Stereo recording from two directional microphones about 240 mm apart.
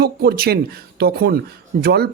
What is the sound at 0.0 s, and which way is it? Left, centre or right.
Speech, right.